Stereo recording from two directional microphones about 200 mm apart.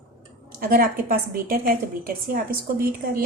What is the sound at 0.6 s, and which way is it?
A woman's voice, 45° right (ahead or behind).